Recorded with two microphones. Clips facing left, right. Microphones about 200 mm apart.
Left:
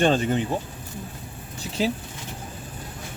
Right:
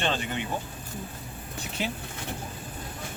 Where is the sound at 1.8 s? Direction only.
35° left (ahead or behind).